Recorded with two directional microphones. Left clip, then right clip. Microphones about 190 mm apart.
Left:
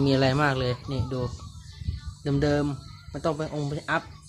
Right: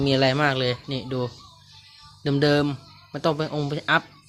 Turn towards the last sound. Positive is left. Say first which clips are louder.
# right 6 dB
turn(degrees=-25)  # may be behind; listen again after turning